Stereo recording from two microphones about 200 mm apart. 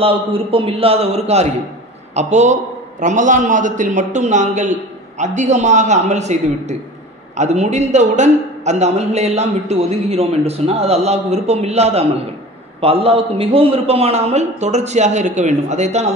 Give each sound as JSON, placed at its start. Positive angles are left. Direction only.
{"t": 0.0, "sound": "a man's voice", "side_deg": -25}